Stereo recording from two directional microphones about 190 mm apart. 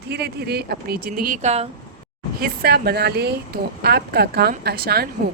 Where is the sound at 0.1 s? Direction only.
60° right (ahead or behind); by 1.6 s 35° right (ahead or behind).